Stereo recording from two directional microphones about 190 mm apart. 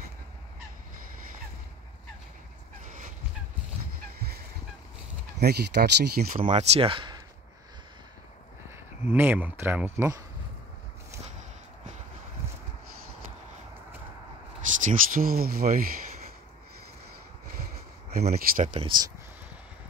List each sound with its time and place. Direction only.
2.8 s fowl: 45° right (ahead or behind)
5.4 s speech: 60° right (ahead or behind)
6.4 s speech: 35° right (ahead or behind)
8.7 s speech: 10° right (ahead or behind)
14.8 s speech: 45° right (ahead or behind)
18.3 s speech: 40° right (ahead or behind)